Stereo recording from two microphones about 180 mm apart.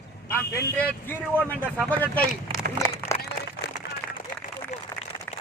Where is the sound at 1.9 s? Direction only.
10° left (ahead or behind).